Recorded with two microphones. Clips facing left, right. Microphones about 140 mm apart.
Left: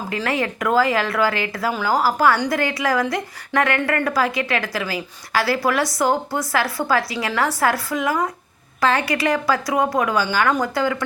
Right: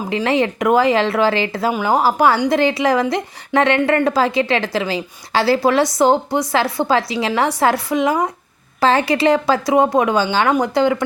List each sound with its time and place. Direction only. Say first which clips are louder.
0.1 s a woman's voice: right 6 dB; 20° right (ahead or behind)